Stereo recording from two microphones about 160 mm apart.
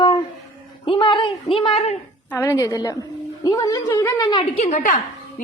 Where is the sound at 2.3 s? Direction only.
15° left (ahead or behind).